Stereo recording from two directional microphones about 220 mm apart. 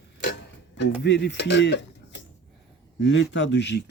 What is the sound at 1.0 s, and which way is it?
Speech, 55° left (ahead or behind).